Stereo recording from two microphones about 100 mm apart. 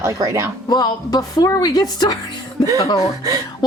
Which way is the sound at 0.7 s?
45° left (ahead or behind).